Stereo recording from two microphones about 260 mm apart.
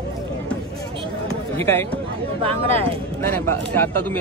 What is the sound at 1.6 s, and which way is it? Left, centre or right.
Speech, centre.